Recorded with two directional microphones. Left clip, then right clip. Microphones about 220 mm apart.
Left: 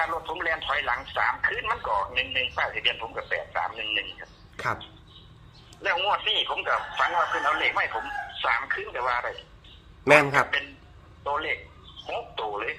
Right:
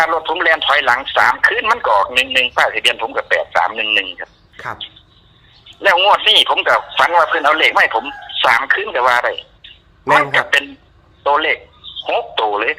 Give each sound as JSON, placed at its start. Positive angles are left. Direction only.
{"t": 0.0, "sound": "speech", "side_deg": -50}
{"t": 4.5, "sound": "speech", "side_deg": 0}
{"t": 5.8, "sound": "speech", "side_deg": -50}
{"t": 10.0, "sound": "a man's voice", "side_deg": 0}
{"t": 11.2, "sound": "a man's voice", "side_deg": -50}